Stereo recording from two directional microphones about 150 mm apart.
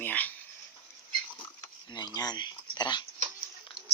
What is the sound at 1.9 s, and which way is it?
Speech, 25° left (ahead or behind).